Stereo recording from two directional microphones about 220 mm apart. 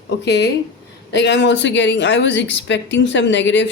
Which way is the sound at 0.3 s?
50° left (ahead or behind).